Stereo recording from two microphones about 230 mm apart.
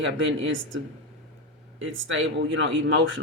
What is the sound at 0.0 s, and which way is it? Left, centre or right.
Speech, right.